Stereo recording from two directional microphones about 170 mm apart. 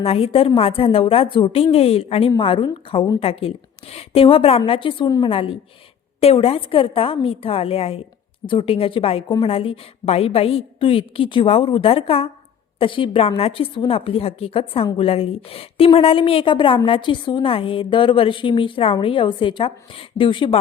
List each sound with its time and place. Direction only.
0.0 s a woman's voice: 35° left (ahead or behind)